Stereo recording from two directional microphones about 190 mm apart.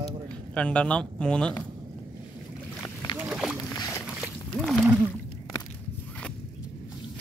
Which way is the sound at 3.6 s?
15° left (ahead or behind).